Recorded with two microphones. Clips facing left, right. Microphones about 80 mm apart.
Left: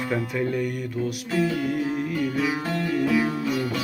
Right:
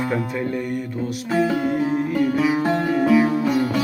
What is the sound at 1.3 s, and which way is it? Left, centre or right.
Music, right.